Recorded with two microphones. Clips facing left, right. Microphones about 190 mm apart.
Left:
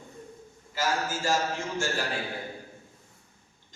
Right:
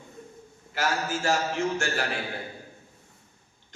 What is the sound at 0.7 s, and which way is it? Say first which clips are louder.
A man's voice: right 1 dB; 65° right (ahead or behind).